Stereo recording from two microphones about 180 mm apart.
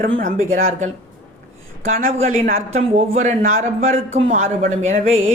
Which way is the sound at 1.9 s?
50° right (ahead or behind).